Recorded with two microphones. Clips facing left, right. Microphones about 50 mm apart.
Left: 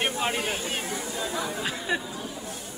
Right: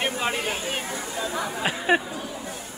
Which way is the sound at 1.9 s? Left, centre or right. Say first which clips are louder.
Right 8 dB; right.